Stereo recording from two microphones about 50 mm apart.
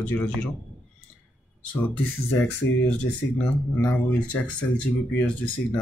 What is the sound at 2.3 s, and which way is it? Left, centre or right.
Speech, left.